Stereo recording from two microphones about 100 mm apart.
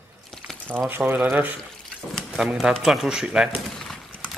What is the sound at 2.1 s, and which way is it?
Speech, centre (ahead or behind).